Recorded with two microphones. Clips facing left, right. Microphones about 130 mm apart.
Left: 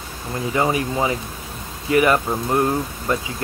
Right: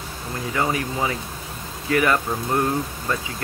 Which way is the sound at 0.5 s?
20° left (ahead or behind).